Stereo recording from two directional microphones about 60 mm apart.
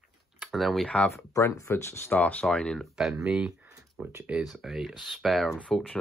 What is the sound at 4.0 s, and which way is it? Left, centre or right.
Speech, right.